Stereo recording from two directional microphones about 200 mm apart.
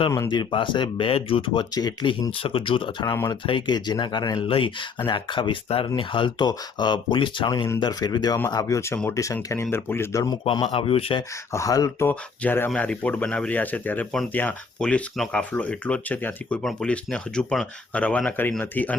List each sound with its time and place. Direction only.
0.0 s speech: 20° left (ahead or behind)
11.5 s speech: 15° left (ahead or behind)